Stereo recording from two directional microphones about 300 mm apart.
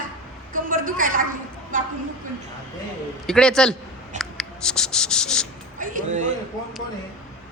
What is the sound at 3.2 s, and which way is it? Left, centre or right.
Speech, centre.